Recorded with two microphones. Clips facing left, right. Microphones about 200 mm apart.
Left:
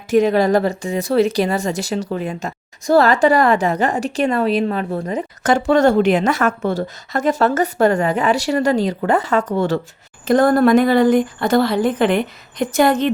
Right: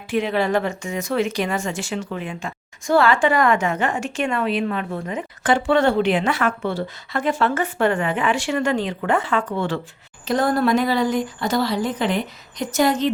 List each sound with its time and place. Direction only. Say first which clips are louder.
0.1 s a woman's voice: left 6 dB; 40° left (ahead or behind)